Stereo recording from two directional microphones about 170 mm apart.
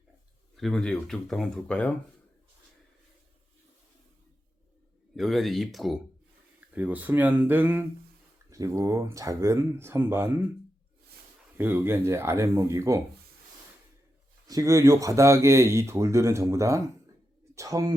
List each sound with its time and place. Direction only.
0.5 s speech: centre (ahead or behind)
5.1 s speech: centre (ahead or behind)
11.5 s speech: 10° right (ahead or behind)
14.4 s speech: 20° right (ahead or behind)